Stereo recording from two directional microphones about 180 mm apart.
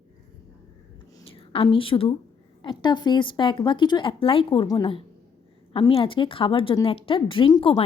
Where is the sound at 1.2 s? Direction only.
30° left (ahead or behind).